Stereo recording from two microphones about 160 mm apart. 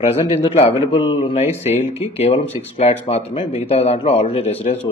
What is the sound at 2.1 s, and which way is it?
Speech, 40° left (ahead or behind).